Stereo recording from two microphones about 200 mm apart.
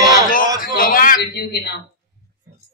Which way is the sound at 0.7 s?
45° left (ahead or behind).